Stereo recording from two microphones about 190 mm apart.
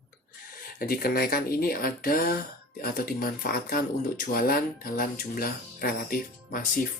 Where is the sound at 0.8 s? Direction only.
50° left (ahead or behind).